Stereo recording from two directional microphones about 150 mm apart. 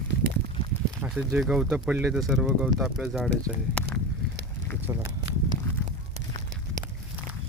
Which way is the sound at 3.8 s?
10° left (ahead or behind).